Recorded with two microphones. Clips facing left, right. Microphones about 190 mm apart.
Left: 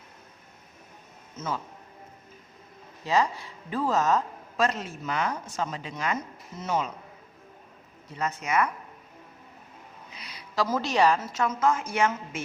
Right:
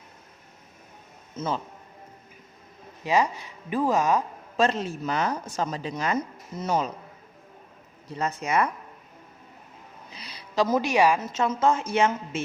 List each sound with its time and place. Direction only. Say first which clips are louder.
1.4 s a woman's voice: right 4 dB; 30° right (ahead or behind)
3.0 s speech: right 2 dB; 15° right (ahead or behind)
4.5 s speech: right 3 dB; 30° right (ahead or behind)
8.1 s speech: right 2 dB; 30° right (ahead or behind)
10.2 s a sound: right 2 dB; 35° right (ahead or behind)
10.5 s speech: right 4 dB; 20° right (ahead or behind)
11.3 s a woman's voice: right 2 dB; 25° right (ahead or behind)